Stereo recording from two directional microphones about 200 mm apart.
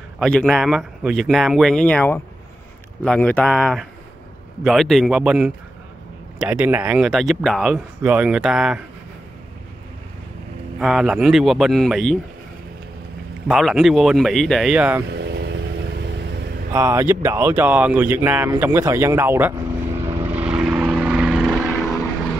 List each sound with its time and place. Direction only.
0.2 s speech: 5° left (ahead or behind)
10.8 s speech: centre (ahead or behind)
13.5 s speech: centre (ahead or behind)
15.1 s vehicle: 55° right (ahead or behind)
16.7 s speech: 10° right (ahead or behind)
20.1 s vehicle: 10° right (ahead or behind)